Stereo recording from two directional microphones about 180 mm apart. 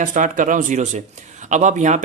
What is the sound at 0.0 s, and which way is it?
A man's voice, 45° right (ahead or behind).